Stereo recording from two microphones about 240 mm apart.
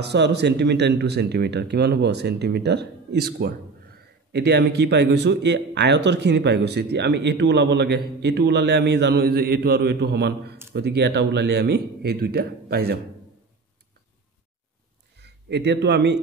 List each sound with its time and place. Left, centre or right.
0.0 s a man's voice: right
15.1 s speech: right